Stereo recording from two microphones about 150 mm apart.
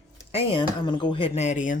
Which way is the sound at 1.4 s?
55° left (ahead or behind).